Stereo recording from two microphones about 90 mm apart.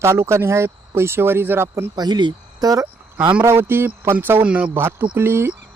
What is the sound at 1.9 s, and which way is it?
Speech, 50° right (ahead or behind).